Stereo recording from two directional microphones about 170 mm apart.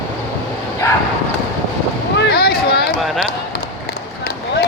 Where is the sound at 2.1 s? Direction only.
65° left (ahead or behind).